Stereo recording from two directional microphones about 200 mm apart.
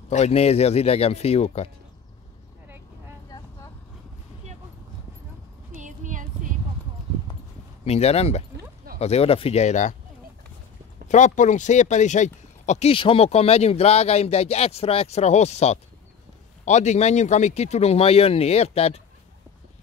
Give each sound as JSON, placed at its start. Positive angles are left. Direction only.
{"t": 0.1, "sound": "speech", "side_deg": 30}
{"t": 5.8, "sound": "a sound", "side_deg": -40}
{"t": 7.8, "sound": "speech", "side_deg": 30}
{"t": 11.1, "sound": "speech", "side_deg": 35}